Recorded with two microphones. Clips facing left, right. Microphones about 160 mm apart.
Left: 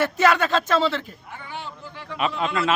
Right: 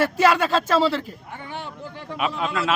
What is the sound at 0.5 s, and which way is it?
Speech, 35° right (ahead or behind).